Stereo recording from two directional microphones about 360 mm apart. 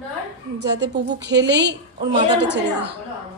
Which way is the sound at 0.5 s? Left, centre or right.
Right.